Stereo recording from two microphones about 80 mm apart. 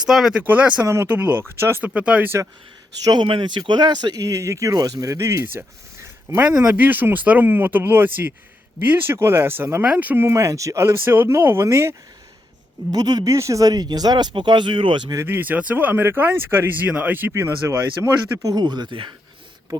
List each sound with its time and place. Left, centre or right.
0.0 s speech: centre
0.3 s speech: centre
1.9 s speech: centre
3.0 s speech: right
5.1 s a man's voice: right
9.8 s speech: centre
10.2 s speech: right
12.9 s speech: right
13.3 s speech: right
15.3 s speech: right
17.3 s speech: right
18.4 s speech: right